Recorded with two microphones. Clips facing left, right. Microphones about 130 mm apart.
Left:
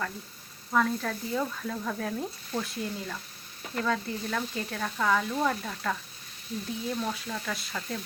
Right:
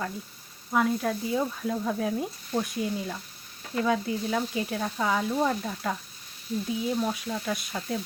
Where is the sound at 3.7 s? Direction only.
15° right (ahead or behind).